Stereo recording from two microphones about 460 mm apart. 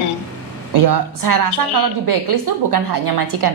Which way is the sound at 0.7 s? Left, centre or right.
Right.